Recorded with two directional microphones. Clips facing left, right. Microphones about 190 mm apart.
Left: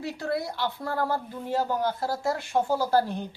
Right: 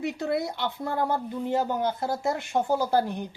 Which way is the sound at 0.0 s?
20° right (ahead or behind).